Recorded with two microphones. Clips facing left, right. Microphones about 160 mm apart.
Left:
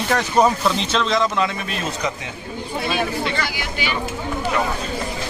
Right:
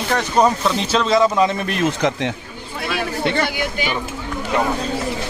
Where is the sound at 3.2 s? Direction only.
55° right (ahead or behind).